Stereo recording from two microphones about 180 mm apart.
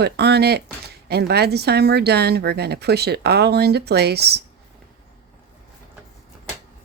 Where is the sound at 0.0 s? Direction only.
65° right (ahead or behind).